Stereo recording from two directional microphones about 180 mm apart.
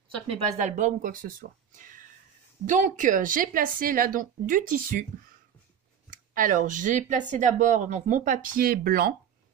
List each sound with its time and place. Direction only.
0.3 s speech: 40° right (ahead or behind)
1.8 s a sound: 50° right (ahead or behind)
2.6 s speech: 45° right (ahead or behind)
6.0 s speech: 45° right (ahead or behind)